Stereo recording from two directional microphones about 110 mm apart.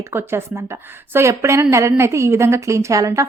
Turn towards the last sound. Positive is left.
turn(degrees=-30)  # may be behind; listen again after turning